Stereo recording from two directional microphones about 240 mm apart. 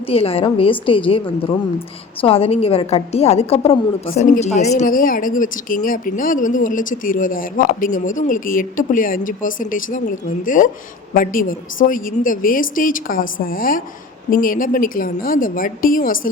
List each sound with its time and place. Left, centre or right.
0.1 s a woman's voice: left